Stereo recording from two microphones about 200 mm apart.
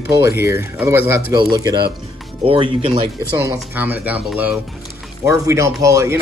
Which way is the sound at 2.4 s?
25° right (ahead or behind).